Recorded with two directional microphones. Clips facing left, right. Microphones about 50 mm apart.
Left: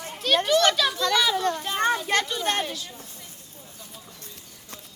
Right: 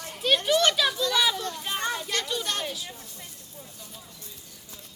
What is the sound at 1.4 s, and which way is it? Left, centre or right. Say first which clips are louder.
A child's voice: left 6 dB; left.